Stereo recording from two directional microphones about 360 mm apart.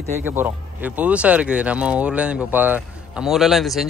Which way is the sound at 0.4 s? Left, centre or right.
Centre.